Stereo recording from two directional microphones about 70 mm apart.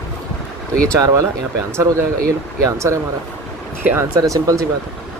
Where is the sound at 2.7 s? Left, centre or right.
Right.